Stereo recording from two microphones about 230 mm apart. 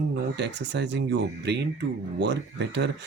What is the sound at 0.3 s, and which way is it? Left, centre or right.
Speech, right.